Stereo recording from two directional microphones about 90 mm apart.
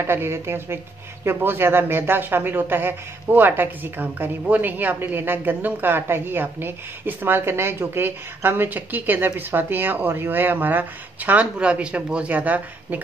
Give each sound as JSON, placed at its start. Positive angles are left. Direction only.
{"t": 0.0, "sound": "speech", "side_deg": -25}